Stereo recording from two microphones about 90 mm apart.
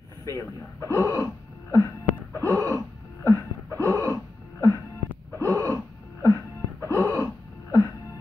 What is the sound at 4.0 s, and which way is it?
Cough, 35° left (ahead or behind).